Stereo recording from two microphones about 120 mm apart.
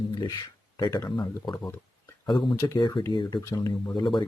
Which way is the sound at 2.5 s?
25° left (ahead or behind).